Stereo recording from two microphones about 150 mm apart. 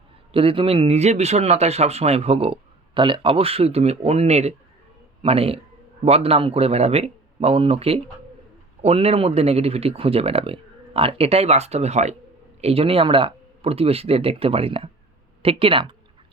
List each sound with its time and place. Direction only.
0.3 s speech: 35° right (ahead or behind)